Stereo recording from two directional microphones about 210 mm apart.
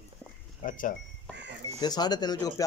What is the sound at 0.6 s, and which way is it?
Speech, 40° left (ahead or behind).